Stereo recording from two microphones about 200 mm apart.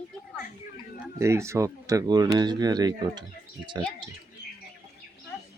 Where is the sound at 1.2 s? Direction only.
15° right (ahead or behind).